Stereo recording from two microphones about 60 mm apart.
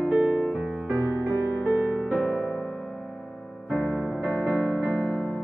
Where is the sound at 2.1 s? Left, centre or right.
Centre.